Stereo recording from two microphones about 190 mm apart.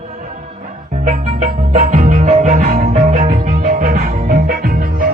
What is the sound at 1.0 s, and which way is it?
Music, 40° right (ahead or behind).